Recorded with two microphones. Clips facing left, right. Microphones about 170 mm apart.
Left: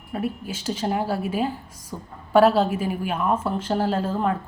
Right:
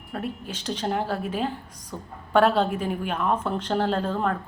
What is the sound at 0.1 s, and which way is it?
A woman's voice, 10° left (ahead or behind).